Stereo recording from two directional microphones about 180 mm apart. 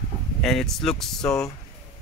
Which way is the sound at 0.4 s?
Centre (ahead or behind).